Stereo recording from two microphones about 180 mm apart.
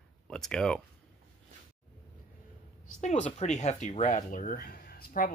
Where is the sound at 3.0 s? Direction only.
40° left (ahead or behind).